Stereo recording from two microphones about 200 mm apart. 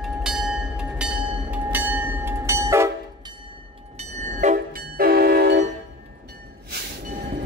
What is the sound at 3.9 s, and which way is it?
Train, 35° right (ahead or behind).